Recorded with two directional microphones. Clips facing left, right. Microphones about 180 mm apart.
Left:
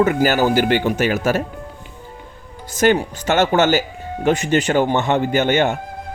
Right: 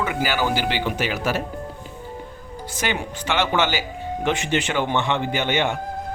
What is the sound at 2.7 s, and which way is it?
A man's voice, 45° left (ahead or behind).